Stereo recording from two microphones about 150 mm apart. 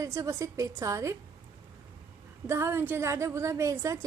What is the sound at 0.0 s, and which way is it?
A woman's voice, 20° right (ahead or behind).